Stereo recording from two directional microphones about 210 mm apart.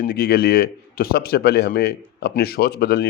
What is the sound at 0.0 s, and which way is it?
A man's voice, 45° left (ahead or behind).